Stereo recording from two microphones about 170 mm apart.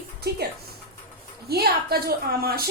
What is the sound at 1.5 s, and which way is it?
A woman's voice, 65° right (ahead or behind).